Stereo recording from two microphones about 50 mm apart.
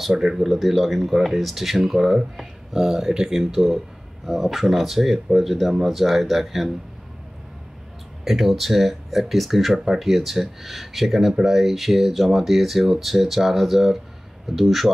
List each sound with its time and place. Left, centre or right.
0.0 s speech: centre
8.2 s speech: centre